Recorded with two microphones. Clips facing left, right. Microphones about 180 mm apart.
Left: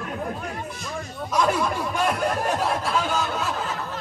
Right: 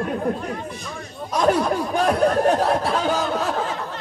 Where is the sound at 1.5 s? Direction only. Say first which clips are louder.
Right 5 dB; 35° right (ahead or behind).